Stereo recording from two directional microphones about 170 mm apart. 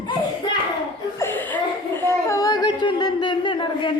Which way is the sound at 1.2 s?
10° left (ahead or behind).